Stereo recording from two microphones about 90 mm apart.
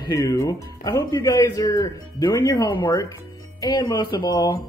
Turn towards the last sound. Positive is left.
turn(degrees=45)  # may be behind; listen again after turning